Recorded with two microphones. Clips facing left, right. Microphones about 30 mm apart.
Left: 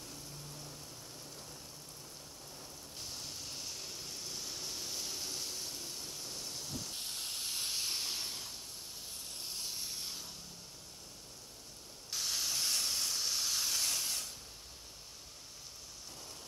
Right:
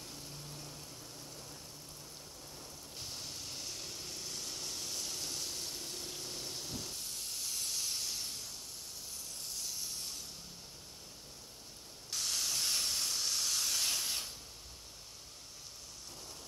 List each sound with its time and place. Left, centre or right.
0.4 s vehicle: centre
3.0 s vehicle: centre
7.0 s hiss: left
9.6 s a sound: left
12.1 s steam: centre